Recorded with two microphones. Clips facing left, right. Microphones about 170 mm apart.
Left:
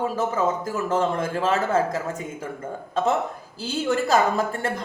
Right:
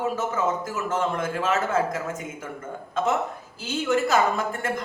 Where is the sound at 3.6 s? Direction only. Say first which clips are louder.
Even; 35° left (ahead or behind).